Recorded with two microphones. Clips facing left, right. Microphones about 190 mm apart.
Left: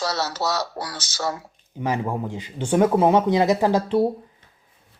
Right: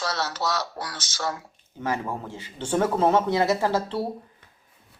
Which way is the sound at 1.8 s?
15° left (ahead or behind).